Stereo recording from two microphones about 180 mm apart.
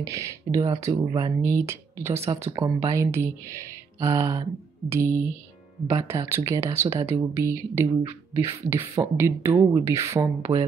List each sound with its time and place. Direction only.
0.0 s speech: 15° right (ahead or behind)
10.4 s speech: 25° right (ahead or behind)